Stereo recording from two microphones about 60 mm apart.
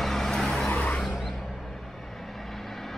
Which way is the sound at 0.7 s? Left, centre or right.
Left.